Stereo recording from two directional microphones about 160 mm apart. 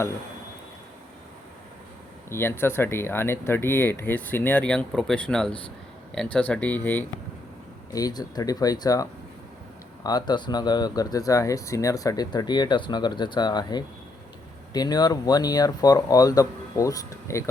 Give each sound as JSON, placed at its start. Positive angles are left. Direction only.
{"t": 2.3, "sound": "speech", "side_deg": 15}
{"t": 7.9, "sound": "speech", "side_deg": 25}